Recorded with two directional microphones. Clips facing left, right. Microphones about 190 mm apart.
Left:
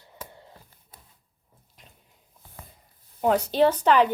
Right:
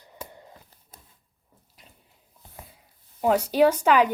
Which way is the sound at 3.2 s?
5° right (ahead or behind).